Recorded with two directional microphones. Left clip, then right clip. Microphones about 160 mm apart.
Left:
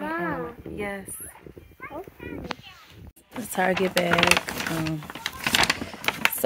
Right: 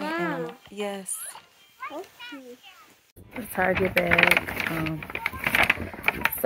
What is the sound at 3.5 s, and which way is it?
Speech, 30° left (ahead or behind).